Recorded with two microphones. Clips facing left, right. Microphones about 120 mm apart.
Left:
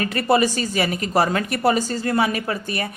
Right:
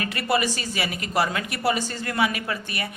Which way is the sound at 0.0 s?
35° left (ahead or behind).